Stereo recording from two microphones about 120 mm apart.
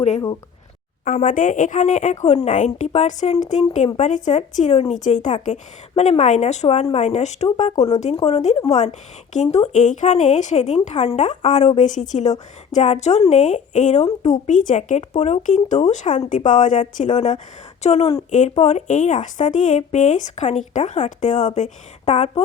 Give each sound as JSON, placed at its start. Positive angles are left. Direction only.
{"t": 1.0, "sound": "a woman's voice", "side_deg": 90}
{"t": 3.9, "sound": "a woman's voice", "side_deg": 85}
{"t": 8.1, "sound": "a woman's voice", "side_deg": 55}
{"t": 11.8, "sound": "a woman's voice", "side_deg": 90}
{"t": 17.0, "sound": "a woman's voice", "side_deg": 75}
{"t": 18.3, "sound": "speech", "side_deg": 90}
{"t": 18.5, "sound": "a woman's voice", "side_deg": 70}